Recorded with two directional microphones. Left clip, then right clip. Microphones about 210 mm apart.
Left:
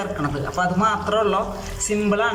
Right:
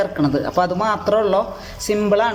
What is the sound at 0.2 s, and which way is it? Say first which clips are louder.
A man's voice: right 3 dB; 25° right (ahead or behind).